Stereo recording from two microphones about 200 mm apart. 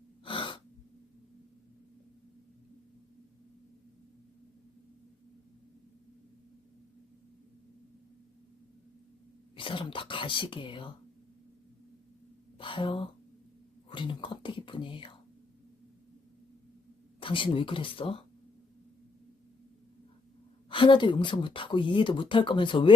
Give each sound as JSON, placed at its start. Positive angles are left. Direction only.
{"t": 0.3, "sound": "gasp", "side_deg": 25}
{"t": 9.6, "sound": "speech", "side_deg": 25}
{"t": 12.5, "sound": "a sound", "side_deg": 25}
{"t": 13.9, "sound": "speech", "side_deg": 25}
{"t": 17.2, "sound": "speech", "side_deg": 25}
{"t": 20.7, "sound": "speech", "side_deg": 25}